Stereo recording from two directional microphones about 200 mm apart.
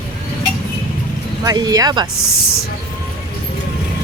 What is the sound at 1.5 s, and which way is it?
Speech, 20° right (ahead or behind).